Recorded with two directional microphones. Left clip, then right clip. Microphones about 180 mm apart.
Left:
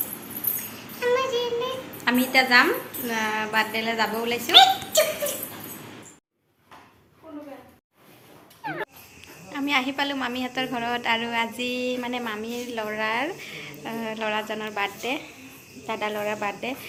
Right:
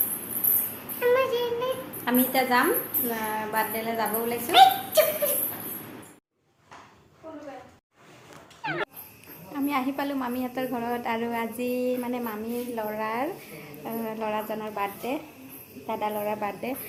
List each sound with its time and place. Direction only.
0.9 s child singing: 40° right (ahead or behind)
1.5 s a sound: centre (ahead or behind)
3.1 s a woman's voice: 10° left (ahead or behind)
4.5 s a sound: 5° right (ahead or behind)
8.6 s music: centre (ahead or behind)
9.5 s a woman's voice: centre (ahead or behind)